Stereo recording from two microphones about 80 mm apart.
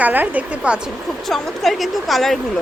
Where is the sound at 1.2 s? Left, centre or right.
Centre.